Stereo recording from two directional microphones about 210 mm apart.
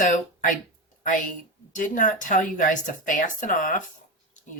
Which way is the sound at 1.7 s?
40° left (ahead or behind).